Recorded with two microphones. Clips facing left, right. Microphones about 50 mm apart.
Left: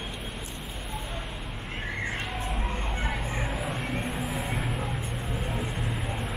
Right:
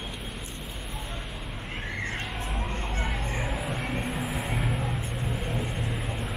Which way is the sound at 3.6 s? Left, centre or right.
Centre.